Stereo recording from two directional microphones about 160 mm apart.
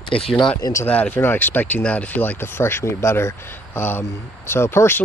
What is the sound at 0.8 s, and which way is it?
Speech, 10° left (ahead or behind).